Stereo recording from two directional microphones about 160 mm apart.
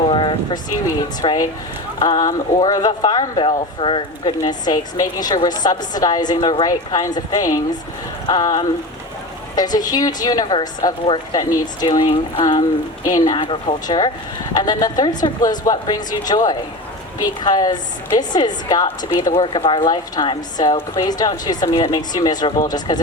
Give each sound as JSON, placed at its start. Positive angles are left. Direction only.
{"t": 0.1, "sound": "speech", "side_deg": 30}